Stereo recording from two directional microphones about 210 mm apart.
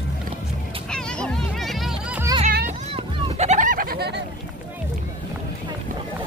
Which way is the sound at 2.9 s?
30° right (ahead or behind).